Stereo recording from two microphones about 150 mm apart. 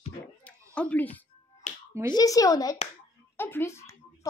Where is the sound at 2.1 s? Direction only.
25° left (ahead or behind).